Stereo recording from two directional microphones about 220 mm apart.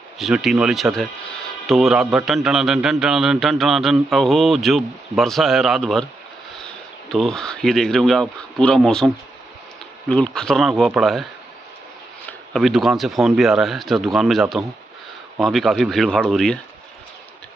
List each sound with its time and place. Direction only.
0.2 s speech: centre (ahead or behind)
7.1 s speech: centre (ahead or behind)
12.3 s speech: centre (ahead or behind)